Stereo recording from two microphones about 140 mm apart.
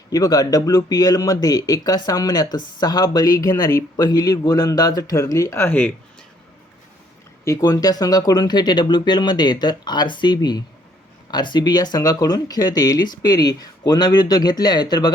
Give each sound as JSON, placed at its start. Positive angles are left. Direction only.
{"t": 0.1, "sound": "speech", "side_deg": 25}
{"t": 7.4, "sound": "speech", "side_deg": 25}